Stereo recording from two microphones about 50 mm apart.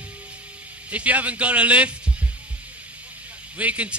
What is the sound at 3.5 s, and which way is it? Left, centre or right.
Speech, right.